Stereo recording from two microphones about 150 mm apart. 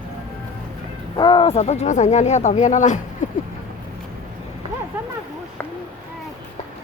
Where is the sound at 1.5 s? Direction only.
50° left (ahead or behind).